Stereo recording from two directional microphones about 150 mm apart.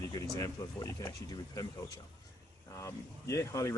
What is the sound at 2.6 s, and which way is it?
Speech, 20° left (ahead or behind).